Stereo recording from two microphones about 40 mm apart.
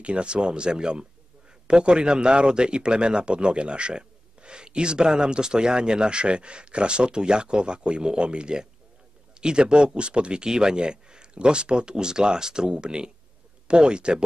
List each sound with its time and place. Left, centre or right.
0.0 s a man's voice: right